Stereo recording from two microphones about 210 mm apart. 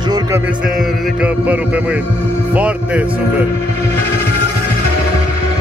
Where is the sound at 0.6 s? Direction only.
5° right (ahead or behind).